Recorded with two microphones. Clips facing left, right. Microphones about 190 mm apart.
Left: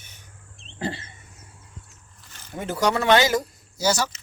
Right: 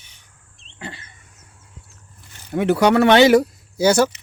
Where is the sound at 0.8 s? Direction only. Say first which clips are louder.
Left 6 dB; 30° left (ahead or behind).